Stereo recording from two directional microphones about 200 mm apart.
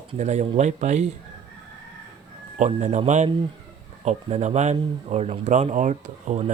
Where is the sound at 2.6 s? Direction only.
35° right (ahead or behind).